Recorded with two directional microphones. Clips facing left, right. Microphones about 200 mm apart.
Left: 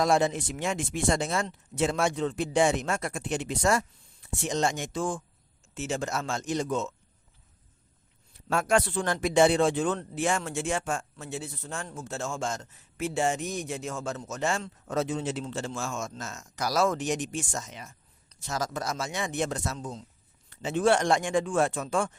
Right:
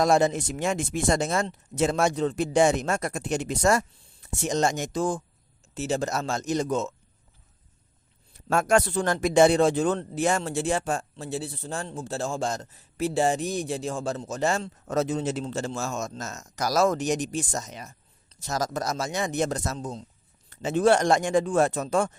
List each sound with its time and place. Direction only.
0.0 s speech: 45° right (ahead or behind)
8.4 s speech: 45° right (ahead or behind)